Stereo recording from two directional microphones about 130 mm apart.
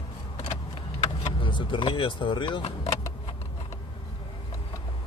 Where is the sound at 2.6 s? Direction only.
55° left (ahead or behind).